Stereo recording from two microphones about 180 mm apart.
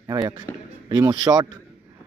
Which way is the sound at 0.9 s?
25° right (ahead or behind).